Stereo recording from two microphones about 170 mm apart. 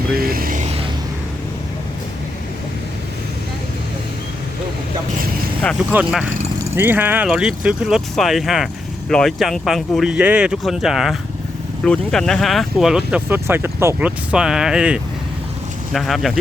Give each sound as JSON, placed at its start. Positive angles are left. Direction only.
{"t": 0.2, "sound": "music", "side_deg": -60}
{"t": 5.9, "sound": "speech", "side_deg": -5}